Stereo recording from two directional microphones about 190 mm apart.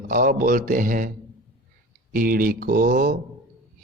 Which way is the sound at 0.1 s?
45° right (ahead or behind).